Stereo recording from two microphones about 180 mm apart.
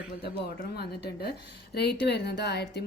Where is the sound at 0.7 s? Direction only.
60° left (ahead or behind).